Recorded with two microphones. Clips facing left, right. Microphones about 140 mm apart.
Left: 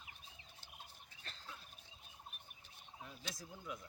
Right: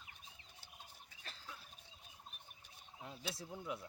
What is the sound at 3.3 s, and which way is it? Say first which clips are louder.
Speech: right 4 dB; 30° right (ahead or behind).